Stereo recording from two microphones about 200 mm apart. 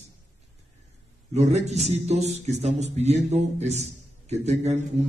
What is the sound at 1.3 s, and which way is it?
A man's voice, 35° right (ahead or behind).